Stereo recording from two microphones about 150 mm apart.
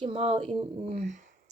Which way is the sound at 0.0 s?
40° right (ahead or behind).